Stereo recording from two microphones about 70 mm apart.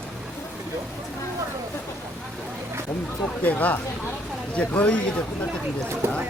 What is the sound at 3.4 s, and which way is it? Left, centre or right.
Speech, left.